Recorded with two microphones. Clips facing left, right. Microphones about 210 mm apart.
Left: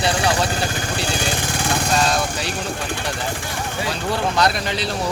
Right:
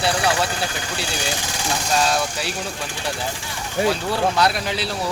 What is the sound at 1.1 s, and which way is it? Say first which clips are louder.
Vehicle: left 4 dB; 55° left (ahead or behind).